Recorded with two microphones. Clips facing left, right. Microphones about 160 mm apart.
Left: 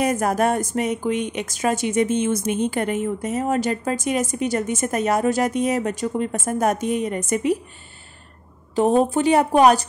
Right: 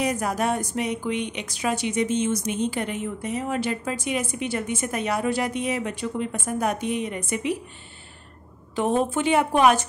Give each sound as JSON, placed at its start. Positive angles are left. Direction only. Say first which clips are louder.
{"t": 0.0, "sound": "a woman's voice", "louder": "left 5 dB", "side_deg": 50}
{"t": 8.7, "sound": "speech", "louder": "left 5 dB", "side_deg": 35}